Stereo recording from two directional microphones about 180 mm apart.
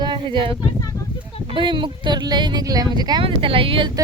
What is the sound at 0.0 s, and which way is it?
Speech, 25° right (ahead or behind).